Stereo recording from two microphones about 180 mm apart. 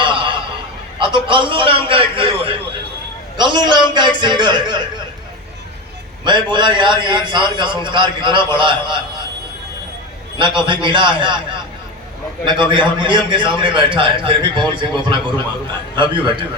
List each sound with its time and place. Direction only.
0.0 s a sound: 25° right (ahead or behind)
0.9 s a man's voice: 25° right (ahead or behind)
6.2 s a man's voice: 25° right (ahead or behind)
10.3 s a man's voice: 25° right (ahead or behind)
12.5 s a man's voice: 25° right (ahead or behind)